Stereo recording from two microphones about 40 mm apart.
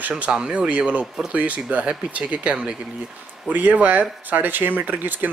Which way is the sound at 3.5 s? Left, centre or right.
Right.